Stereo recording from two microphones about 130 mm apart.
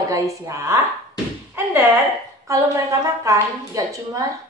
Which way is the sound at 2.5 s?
25° right (ahead or behind).